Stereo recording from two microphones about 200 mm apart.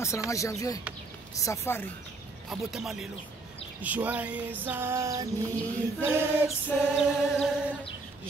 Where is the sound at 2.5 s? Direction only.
Centre (ahead or behind).